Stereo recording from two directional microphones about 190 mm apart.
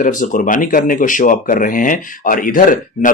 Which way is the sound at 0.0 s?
40° left (ahead or behind).